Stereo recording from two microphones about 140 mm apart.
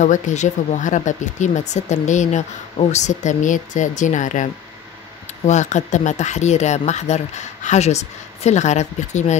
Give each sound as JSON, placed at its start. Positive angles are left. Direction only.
{"t": 0.0, "sound": "speech", "side_deg": 60}